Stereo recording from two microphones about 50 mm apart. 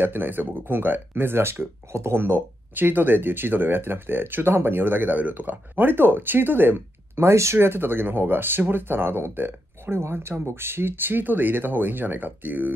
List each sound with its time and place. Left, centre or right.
0.0 s speech: right
2.1 s speech: right